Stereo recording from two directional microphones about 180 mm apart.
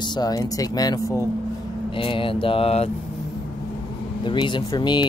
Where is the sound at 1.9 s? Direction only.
30° left (ahead or behind).